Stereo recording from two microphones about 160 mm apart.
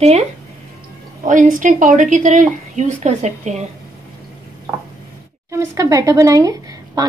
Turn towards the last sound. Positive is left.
turn(degrees=-20)  # may be behind; listen again after turning